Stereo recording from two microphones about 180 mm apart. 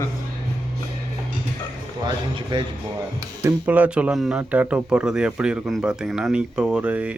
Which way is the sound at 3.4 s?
10° right (ahead or behind).